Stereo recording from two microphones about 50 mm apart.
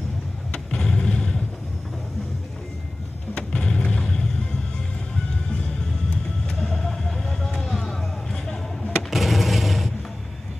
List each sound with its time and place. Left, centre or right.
0.5 s vehicle: centre
3.3 s music: centre
9.1 s vehicle: centre